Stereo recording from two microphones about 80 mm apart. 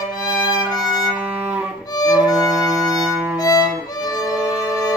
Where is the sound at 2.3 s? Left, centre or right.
Centre.